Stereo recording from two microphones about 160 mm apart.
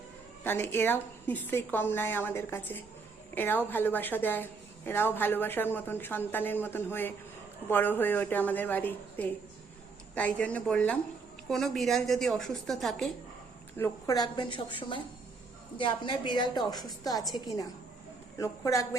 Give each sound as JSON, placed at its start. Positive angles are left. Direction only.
{"t": 0.4, "sound": "a woman's voice", "side_deg": 15}
{"t": 13.7, "sound": "a woman's voice", "side_deg": 20}